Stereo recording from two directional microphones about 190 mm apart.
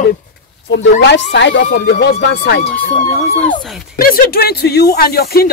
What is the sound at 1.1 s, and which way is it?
Speech, 65° left (ahead or behind).